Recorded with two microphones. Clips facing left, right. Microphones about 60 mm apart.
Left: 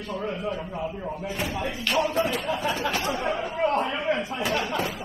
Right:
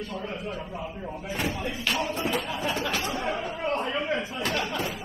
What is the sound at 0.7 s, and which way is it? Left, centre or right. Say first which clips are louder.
Speech: left 4 dB; centre.